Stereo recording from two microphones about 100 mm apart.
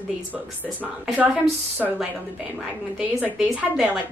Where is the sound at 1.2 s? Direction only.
15° right (ahead or behind).